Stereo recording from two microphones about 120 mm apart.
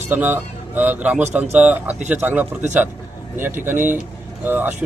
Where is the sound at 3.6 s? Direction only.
15° right (ahead or behind).